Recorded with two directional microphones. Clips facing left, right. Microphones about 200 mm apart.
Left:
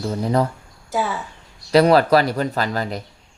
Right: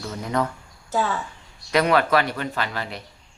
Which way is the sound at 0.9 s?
10° left (ahead or behind).